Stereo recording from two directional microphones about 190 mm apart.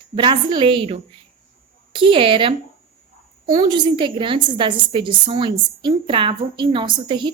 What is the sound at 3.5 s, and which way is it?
A woman's voice, 25° right (ahead or behind).